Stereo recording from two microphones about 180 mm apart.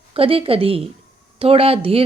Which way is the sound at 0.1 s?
30° right (ahead or behind).